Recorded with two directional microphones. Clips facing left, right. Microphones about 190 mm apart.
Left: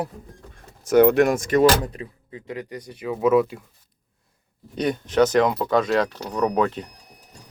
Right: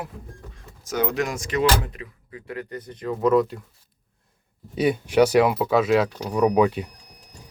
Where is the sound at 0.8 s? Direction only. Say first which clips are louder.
Left 10 dB; 65° left (ahead or behind).